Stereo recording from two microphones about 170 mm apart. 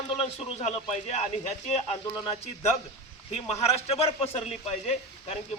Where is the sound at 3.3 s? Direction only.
35° left (ahead or behind).